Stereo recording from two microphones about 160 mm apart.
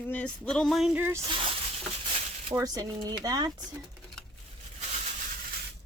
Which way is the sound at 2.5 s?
25° right (ahead or behind).